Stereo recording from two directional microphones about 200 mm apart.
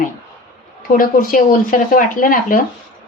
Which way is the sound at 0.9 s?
45° left (ahead or behind).